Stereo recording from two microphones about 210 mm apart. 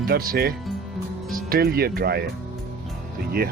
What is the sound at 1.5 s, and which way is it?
Speech, 45° right (ahead or behind).